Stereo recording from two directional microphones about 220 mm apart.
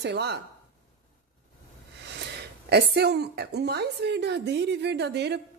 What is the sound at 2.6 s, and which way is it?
A woman's voice, 50° right (ahead or behind).